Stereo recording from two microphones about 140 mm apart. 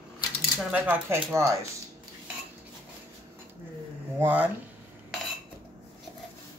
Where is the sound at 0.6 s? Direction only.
10° right (ahead or behind).